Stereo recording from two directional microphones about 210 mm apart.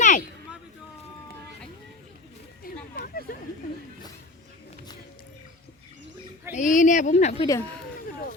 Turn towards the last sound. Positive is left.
turn(degrees=30)  # may be behind; listen again after turning